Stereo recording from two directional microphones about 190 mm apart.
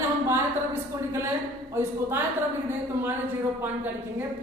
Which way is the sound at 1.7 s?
10° right (ahead or behind).